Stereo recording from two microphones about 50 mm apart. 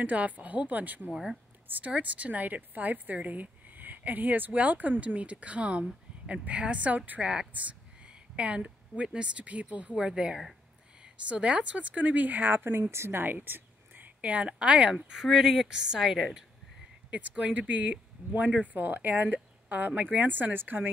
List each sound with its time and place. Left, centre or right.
0.0 s a woman's voice: right
12.9 s speech: right
13.2 s a sound: right
14.2 s speech: right
15.3 s a woman's voice: centre
17.1 s a woman's voice: right